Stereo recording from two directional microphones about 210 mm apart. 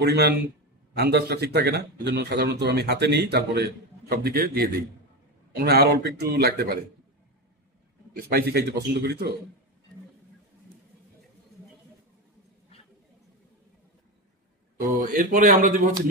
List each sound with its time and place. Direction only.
0.0 s a man's voice: 50° right (ahead or behind)
8.2 s a man's voice: 45° right (ahead or behind)
14.8 s speech: 40° right (ahead or behind)